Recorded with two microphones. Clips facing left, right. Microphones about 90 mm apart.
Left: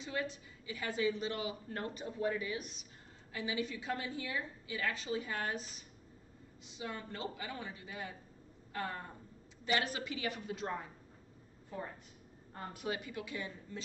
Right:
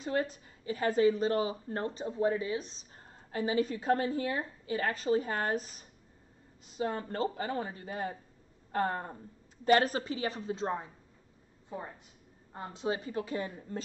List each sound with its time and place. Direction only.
0.0 s a woman's voice: 45° right (ahead or behind)